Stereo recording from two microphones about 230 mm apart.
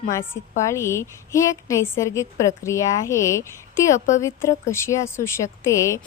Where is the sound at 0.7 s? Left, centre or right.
Centre.